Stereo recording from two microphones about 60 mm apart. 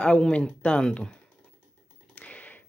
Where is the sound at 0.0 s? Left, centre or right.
Centre.